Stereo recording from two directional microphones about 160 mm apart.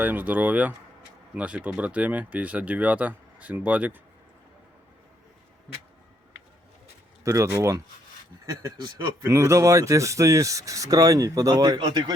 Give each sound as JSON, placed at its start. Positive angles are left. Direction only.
{"t": 0.0, "sound": "speech", "side_deg": -10}
{"t": 7.3, "sound": "speech", "side_deg": -20}
{"t": 9.2, "sound": "speech", "side_deg": -20}